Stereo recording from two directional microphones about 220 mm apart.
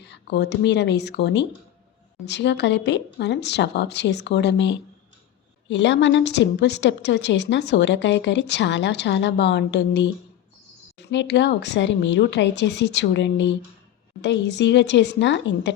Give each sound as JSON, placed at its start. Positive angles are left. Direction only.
{"t": 0.0, "sound": "a woman's voice", "side_deg": 50}
{"t": 11.1, "sound": "a woman's voice", "side_deg": 55}